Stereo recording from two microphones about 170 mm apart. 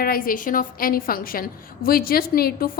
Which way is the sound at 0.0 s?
60° left (ahead or behind).